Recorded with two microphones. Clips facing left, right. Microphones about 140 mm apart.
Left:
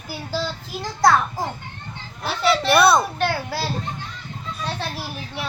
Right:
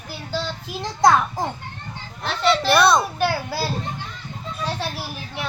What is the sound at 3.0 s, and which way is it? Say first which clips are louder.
Speech: right 1 dB; 5° right (ahead or behind).